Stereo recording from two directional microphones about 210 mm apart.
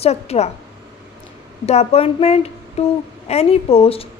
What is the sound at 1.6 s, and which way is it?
A woman's voice, 30° left (ahead or behind).